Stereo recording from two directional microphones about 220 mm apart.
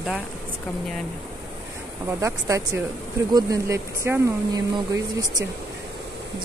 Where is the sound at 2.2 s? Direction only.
15° right (ahead or behind).